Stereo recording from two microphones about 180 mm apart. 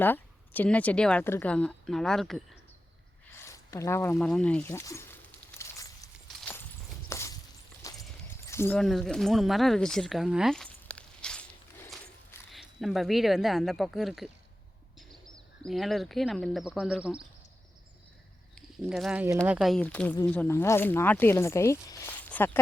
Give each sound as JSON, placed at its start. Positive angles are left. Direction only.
{"t": 0.0, "sound": "speech", "side_deg": 10}
{"t": 3.3, "sound": "zipper", "side_deg": 15}
{"t": 6.2, "sound": "walk", "side_deg": 5}
{"t": 7.1, "sound": "a sound", "side_deg": 15}
{"t": 8.8, "sound": "speech", "side_deg": 0}
{"t": 12.5, "sound": "speech", "side_deg": 0}
{"t": 15.6, "sound": "speech", "side_deg": 0}
{"t": 18.8, "sound": "speech", "side_deg": 0}